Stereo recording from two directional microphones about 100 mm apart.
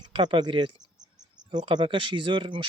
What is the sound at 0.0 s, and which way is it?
Cricket, 50° right (ahead or behind).